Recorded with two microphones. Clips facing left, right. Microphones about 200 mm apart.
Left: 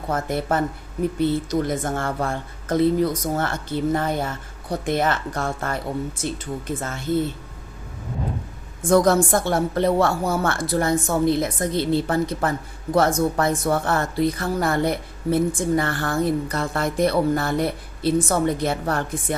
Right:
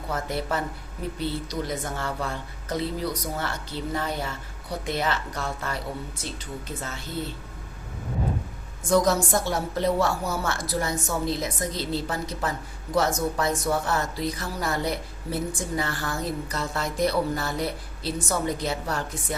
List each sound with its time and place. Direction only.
0.1 s speech: 50° left (ahead or behind)
8.8 s a woman's voice: 55° left (ahead or behind)